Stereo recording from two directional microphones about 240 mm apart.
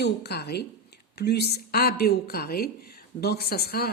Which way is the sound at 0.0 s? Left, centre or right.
Left.